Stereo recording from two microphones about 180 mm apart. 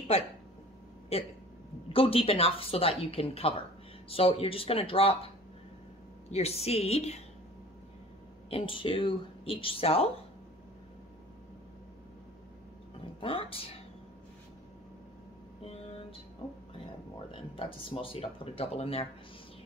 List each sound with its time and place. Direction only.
1.1 s speech: 35° left (ahead or behind)
6.3 s speech: 35° left (ahead or behind)
8.5 s speech: 30° left (ahead or behind)
13.2 s speech: 30° left (ahead or behind)
17.3 s speech: 30° left (ahead or behind)